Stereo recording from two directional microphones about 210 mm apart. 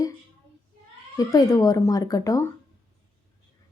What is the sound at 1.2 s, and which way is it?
Speech, 15° left (ahead or behind).